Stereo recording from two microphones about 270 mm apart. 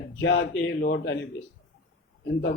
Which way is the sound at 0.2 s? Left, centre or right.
Left.